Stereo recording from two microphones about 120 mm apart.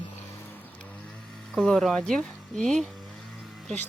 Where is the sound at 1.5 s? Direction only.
Centre (ahead or behind).